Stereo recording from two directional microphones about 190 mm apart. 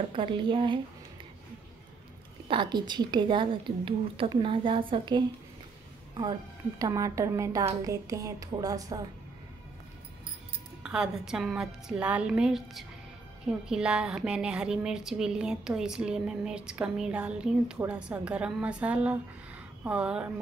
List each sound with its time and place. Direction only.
0.1 s a woman's voice: 25° right (ahead or behind)
2.4 s a woman's voice: 25° right (ahead or behind)
6.8 s a woman's voice: 15° right (ahead or behind)
10.8 s a woman's voice: 5° right (ahead or behind)